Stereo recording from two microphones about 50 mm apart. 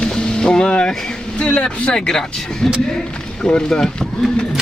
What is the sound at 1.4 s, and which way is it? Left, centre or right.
Vehicle, centre.